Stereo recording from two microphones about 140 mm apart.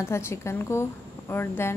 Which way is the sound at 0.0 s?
20° left (ahead or behind).